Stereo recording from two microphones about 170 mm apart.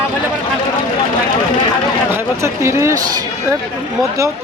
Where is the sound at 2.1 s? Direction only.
15° right (ahead or behind).